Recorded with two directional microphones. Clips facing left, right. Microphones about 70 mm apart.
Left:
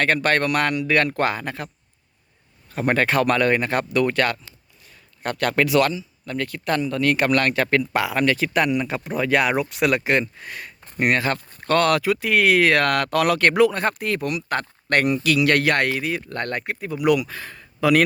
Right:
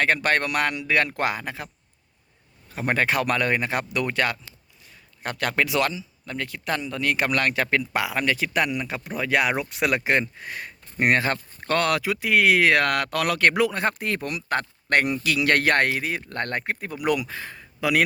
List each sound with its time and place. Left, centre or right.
0.0 s speech: centre
9.6 s speech: right
13.1 s speech: centre; by 17.2 s right
17.2 s speech: right
17.7 s speech: centre